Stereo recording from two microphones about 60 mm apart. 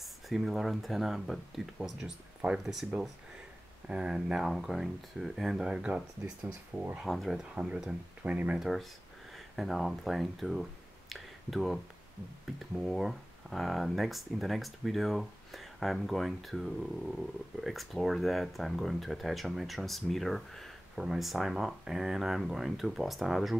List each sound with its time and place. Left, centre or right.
0.0 s speech: centre
3.9 s speech: centre
7.1 s speech: centre
7.5 s speech: centre
8.5 s speech: centre